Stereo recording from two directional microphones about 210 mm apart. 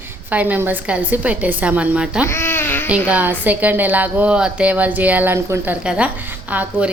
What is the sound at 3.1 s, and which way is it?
A woman's voice, 10° right (ahead or behind).